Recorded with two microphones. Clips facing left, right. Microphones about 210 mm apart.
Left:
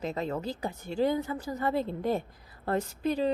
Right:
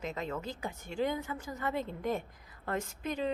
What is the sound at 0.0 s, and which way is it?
Speech, 35° left (ahead or behind).